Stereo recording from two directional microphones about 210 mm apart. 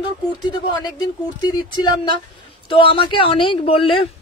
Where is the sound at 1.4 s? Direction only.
20° left (ahead or behind).